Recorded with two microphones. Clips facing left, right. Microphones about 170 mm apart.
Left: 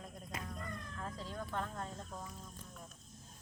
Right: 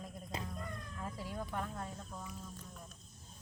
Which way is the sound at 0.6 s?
10° right (ahead or behind).